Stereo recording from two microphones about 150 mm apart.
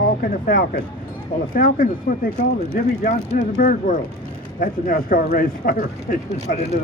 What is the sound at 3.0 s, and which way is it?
Speech, 70° left (ahead or behind).